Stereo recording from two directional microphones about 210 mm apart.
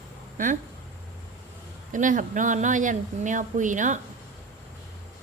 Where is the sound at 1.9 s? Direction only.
40° right (ahead or behind).